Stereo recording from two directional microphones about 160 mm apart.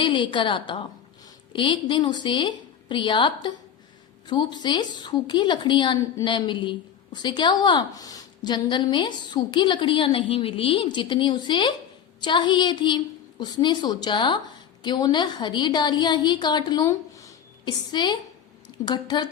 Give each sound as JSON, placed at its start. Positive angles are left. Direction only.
{"t": 0.0, "sound": "a woman's voice", "side_deg": 30}